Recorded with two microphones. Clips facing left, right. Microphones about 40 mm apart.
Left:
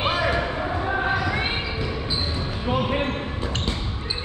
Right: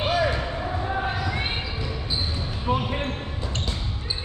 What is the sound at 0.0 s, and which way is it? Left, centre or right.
Basketball bounce, left.